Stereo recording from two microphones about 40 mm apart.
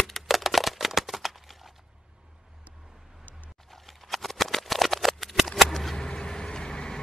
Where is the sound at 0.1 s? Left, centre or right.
Centre.